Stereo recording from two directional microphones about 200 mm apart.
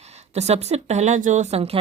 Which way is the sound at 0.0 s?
35° right (ahead or behind).